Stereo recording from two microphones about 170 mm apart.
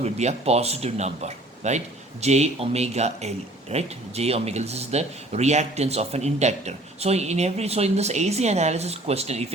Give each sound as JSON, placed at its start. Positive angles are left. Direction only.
{"t": 0.0, "sound": "a man's voice", "side_deg": -40}